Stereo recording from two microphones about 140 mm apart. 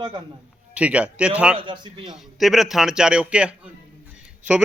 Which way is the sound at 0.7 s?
10° right (ahead or behind).